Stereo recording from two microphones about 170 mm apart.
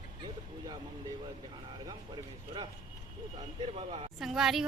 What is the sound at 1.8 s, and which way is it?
Speech, 25° right (ahead or behind).